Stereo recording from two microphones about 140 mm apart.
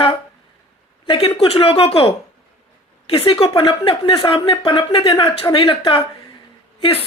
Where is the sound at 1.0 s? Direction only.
40° left (ahead or behind).